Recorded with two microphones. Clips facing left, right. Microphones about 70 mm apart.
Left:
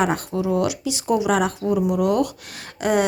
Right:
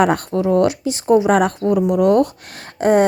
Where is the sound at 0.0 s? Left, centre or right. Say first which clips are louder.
Right 6 dB; right.